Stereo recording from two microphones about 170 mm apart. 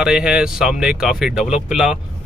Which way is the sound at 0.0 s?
5° right (ahead or behind).